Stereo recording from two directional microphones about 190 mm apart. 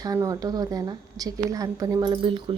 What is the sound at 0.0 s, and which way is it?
A woman's voice, 20° right (ahead or behind).